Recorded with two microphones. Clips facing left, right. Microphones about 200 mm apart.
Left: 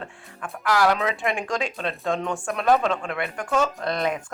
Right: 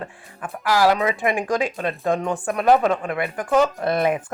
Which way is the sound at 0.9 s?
5° right (ahead or behind).